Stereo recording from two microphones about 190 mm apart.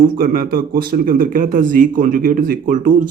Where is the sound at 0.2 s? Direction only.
50° right (ahead or behind).